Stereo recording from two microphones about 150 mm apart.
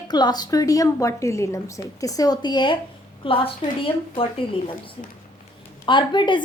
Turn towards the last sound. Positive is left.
turn(degrees=30)  # may be behind; listen again after turning